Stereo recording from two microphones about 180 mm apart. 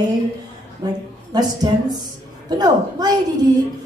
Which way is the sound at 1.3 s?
20° right (ahead or behind).